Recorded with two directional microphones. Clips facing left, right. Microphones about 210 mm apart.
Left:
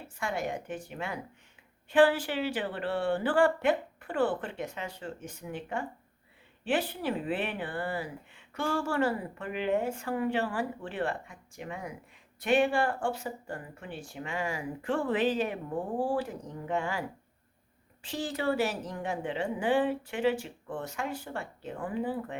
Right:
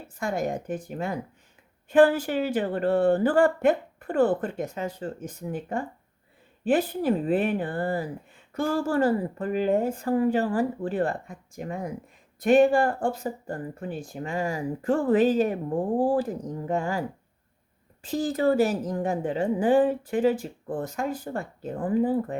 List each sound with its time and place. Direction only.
0.2 s speech: 40° right (ahead or behind)